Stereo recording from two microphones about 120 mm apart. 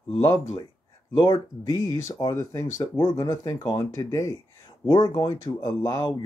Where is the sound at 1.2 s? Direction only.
35° left (ahead or behind).